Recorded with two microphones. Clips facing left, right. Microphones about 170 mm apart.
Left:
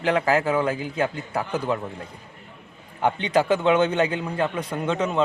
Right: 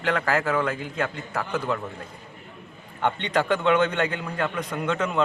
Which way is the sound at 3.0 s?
5° left (ahead or behind).